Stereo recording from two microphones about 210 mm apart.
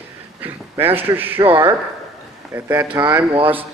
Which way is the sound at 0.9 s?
10° right (ahead or behind).